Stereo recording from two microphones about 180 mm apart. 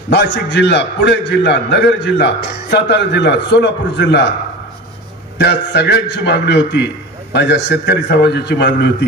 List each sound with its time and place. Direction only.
0.1 s a man's voice: 70° left (ahead or behind)
5.4 s a man's voice: 70° left (ahead or behind)